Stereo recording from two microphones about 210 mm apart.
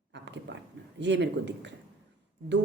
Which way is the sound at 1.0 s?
60° right (ahead or behind).